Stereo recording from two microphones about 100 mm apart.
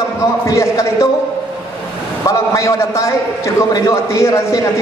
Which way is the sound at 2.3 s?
30° left (ahead or behind).